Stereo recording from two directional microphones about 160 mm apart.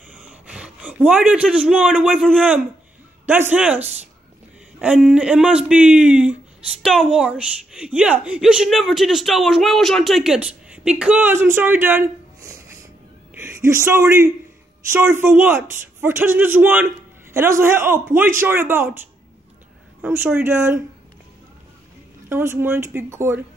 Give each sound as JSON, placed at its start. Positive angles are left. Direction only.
{"t": 0.3, "sound": "a man's voice", "side_deg": -5}
{"t": 20.0, "sound": "a man's voice", "side_deg": -10}
{"t": 22.3, "sound": "a man's voice", "side_deg": -15}